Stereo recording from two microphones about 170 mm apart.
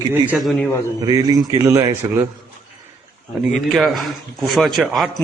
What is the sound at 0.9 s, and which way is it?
A man's voice, 20° right (ahead or behind).